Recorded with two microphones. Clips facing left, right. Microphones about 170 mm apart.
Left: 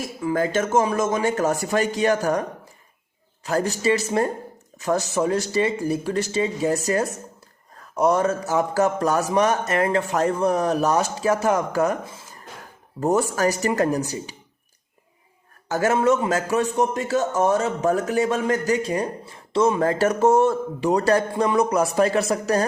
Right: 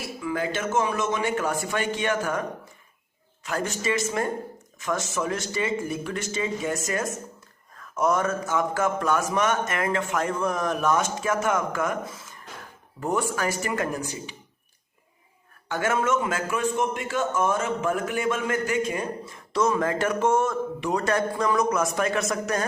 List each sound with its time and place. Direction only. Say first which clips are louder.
0.2 s a man's voice: left 6 dB; 40° left (ahead or behind)
3.4 s a man's voice: left 6 dB; 35° left (ahead or behind)
15.7 s a man's voice: left 5 dB; 35° left (ahead or behind)